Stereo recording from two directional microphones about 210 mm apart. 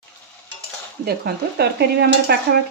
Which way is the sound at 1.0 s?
50° right (ahead or behind).